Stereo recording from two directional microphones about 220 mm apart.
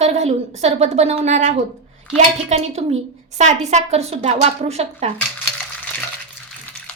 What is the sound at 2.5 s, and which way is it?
A woman's voice, 30° right (ahead or behind).